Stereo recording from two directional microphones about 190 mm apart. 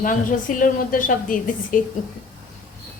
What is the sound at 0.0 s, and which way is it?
A woman's voice, 45° left (ahead or behind).